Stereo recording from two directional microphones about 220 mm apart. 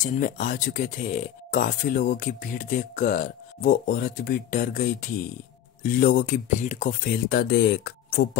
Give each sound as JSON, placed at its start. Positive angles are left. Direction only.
{"t": 0.0, "sound": "speech", "side_deg": 40}